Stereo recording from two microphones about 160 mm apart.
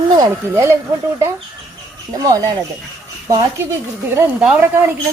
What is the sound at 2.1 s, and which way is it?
Speech, 25° right (ahead or behind).